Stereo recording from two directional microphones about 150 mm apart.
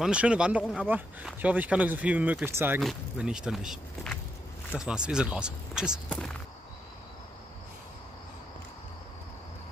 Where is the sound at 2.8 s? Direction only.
5° right (ahead or behind).